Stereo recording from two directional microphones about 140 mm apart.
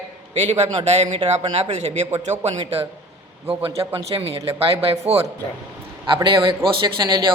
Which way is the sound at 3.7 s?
40° right (ahead or behind).